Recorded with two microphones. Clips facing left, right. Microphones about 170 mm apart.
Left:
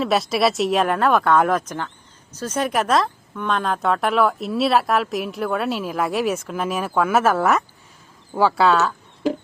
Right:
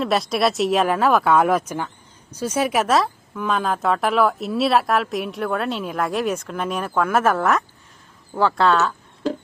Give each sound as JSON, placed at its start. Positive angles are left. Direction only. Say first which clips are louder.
{"t": 0.0, "sound": "a woman's voice", "louder": "left 1 dB", "side_deg": 0}